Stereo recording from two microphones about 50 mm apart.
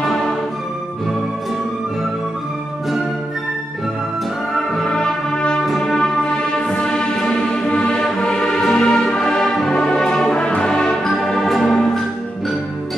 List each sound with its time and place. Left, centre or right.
4.8 s music: centre